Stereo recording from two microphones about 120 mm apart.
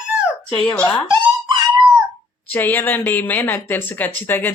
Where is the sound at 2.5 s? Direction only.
15° left (ahead or behind).